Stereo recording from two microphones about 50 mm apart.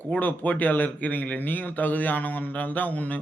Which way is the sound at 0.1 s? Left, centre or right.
Left.